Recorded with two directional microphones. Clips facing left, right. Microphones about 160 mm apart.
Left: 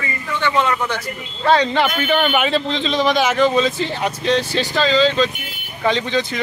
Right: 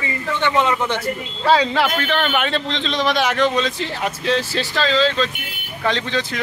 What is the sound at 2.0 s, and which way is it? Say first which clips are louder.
Speech: left 3 dB; 5° left (ahead or behind).